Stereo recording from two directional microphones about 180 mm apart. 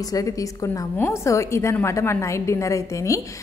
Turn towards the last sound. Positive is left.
turn(degrees=15)  # may be behind; listen again after turning